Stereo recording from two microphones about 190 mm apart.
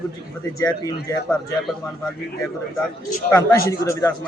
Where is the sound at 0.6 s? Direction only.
20° left (ahead or behind).